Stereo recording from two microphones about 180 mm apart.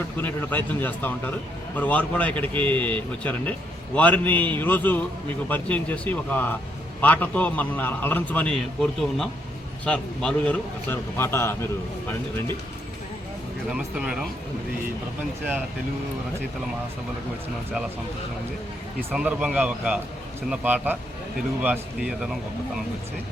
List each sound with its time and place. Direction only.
0.2 s a man's voice: 10° left (ahead or behind)
13.7 s speech: 5° right (ahead or behind)
19.1 s speech: 5° right (ahead or behind)